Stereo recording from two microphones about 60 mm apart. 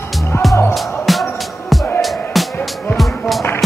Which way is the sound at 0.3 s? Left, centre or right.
Left.